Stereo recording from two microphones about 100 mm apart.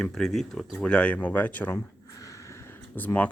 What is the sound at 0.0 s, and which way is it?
Speech, 5° left (ahead or behind).